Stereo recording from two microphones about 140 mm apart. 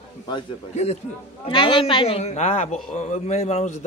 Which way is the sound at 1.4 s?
35° left (ahead or behind).